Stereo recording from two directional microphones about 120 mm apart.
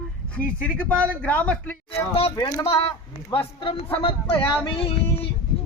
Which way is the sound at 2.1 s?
50° left (ahead or behind).